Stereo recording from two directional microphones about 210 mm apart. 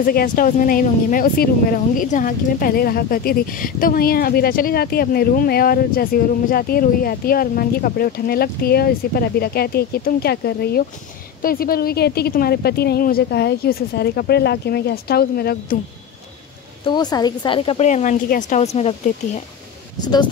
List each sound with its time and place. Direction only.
0.0 s speech: 45° left (ahead or behind)
16.8 s speech: 20° left (ahead or behind)